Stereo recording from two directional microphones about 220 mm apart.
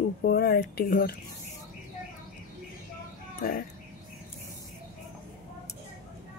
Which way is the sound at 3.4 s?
40° left (ahead or behind).